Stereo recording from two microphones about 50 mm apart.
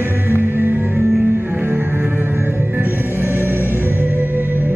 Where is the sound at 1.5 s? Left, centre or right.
Right.